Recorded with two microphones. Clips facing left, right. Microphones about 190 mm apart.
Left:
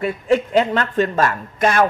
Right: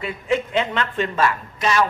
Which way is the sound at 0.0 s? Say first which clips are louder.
Left 5 dB; 40° left (ahead or behind).